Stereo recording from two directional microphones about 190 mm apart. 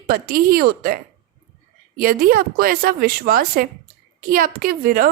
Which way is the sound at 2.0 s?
50° right (ahead or behind).